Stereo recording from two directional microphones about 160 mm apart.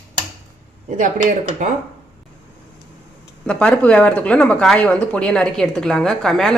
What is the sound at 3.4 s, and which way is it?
Speech, 5° left (ahead or behind).